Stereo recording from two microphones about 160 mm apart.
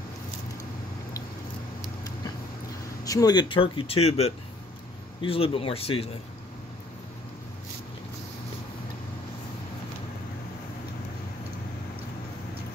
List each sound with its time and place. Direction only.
3.0 s speech: 20° left (ahead or behind)